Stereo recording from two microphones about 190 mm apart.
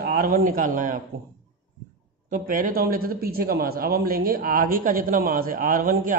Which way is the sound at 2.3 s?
45° right (ahead or behind).